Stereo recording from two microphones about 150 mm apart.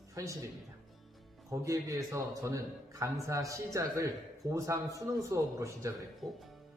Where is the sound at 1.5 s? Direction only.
20° right (ahead or behind).